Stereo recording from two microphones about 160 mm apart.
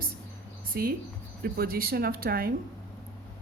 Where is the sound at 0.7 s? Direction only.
65° right (ahead or behind).